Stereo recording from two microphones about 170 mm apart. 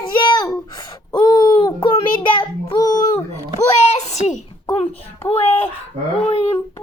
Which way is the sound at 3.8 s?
40° left (ahead or behind).